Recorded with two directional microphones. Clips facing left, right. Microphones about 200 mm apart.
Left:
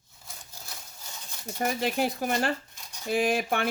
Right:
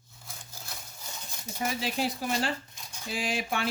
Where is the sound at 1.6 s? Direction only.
50° left (ahead or behind).